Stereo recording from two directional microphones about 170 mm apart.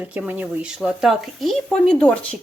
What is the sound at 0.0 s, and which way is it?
A woman's voice, 10° right (ahead or behind).